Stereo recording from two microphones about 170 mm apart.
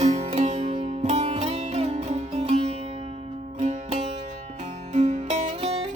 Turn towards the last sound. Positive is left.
turn(degrees=-35)  # may be behind; listen again after turning